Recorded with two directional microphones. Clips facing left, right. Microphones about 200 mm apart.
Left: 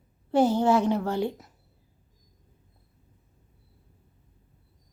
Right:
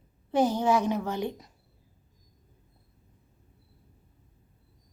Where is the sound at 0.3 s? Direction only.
15° right (ahead or behind).